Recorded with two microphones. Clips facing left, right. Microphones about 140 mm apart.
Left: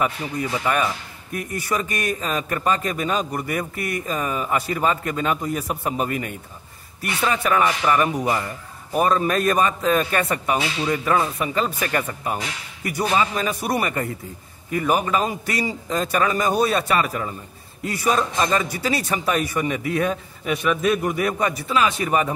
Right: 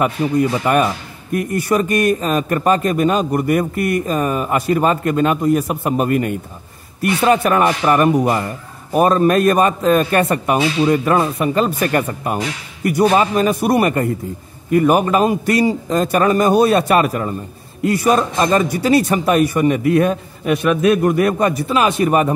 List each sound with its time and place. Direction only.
0.0 s a man's voice: 50° right (ahead or behind)
12.2 s a man's voice: 60° right (ahead or behind); by 17.4 s 45° right (ahead or behind)
18.0 s speech: 55° right (ahead or behind)